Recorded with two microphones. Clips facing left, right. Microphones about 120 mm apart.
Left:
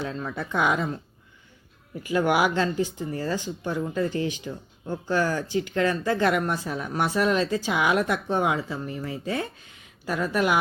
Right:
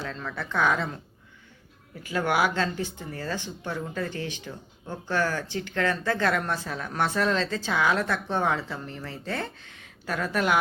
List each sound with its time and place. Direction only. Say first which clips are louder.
0.0 s speech: left 3 dB; 15° left (ahead or behind)
2.0 s speech: left 3 dB; 15° left (ahead or behind)